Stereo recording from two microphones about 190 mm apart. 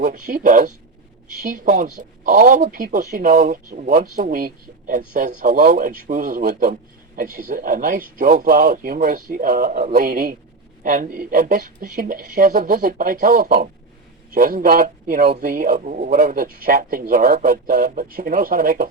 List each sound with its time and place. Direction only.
0.0 s speech: 45° right (ahead or behind)